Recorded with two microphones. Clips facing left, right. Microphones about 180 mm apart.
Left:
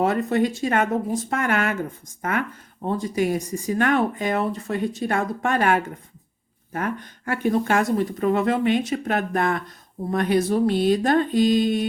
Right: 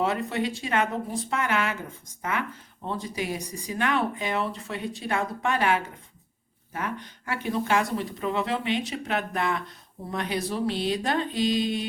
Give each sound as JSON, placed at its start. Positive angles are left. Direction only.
{"t": 0.0, "sound": "speech", "side_deg": 50}
{"t": 2.8, "sound": "speech", "side_deg": 50}